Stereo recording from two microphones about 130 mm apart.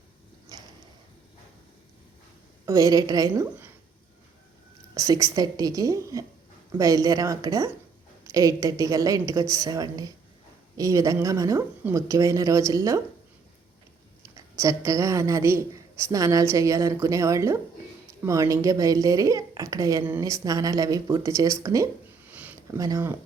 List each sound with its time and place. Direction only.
0.5 s a sound: 30° right (ahead or behind)
2.6 s a woman's voice: 25° right (ahead or behind)
4.9 s a woman's voice: 25° right (ahead or behind)
14.6 s a woman's voice: 25° right (ahead or behind)
22.3 s a sound: 10° right (ahead or behind)
22.8 s a woman's voice: 25° right (ahead or behind)